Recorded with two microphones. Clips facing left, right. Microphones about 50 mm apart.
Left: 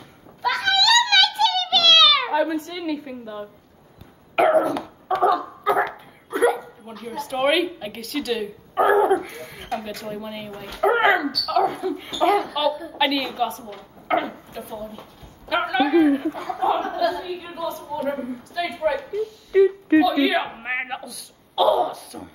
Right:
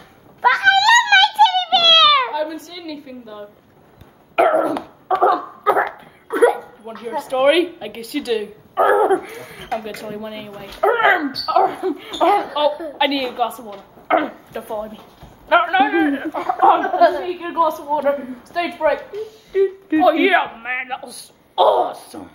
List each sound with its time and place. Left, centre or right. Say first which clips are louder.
0.4 s a sound: right 8 dB; right
2.3 s a sound: left 2 dB; left
4.4 s cough: right 2 dB; centre
5.0 s dog: right 4 dB; centre
6.3 s hiccup: right 5 dB; centre
6.8 s a sound: right 6 dB; centre
7.2 s speech: right 6 dB; centre
11.2 s speech: right 5 dB; centre
14.0 s speech: right 5 dB; centre
14.5 s a man's voice: right 7 dB; right
16.3 s speech: right 8 dB; right
16.9 s a woman's voice: right 9 dB; right
20.0 s a man's voice: right 7 dB; right
20.4 s speech: right 3 dB; centre